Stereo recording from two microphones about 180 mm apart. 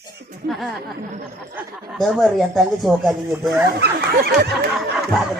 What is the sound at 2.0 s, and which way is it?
Speech, centre (ahead or behind).